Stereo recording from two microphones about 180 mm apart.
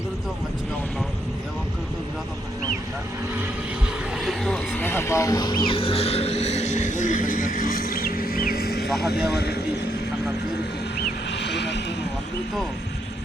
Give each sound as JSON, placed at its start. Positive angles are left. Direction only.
{"t": 4.2, "sound": "speech", "side_deg": 0}
{"t": 8.9, "sound": "speech", "side_deg": 0}
{"t": 9.3, "sound": "speech", "side_deg": 65}
{"t": 11.3, "sound": "vehicle", "side_deg": 75}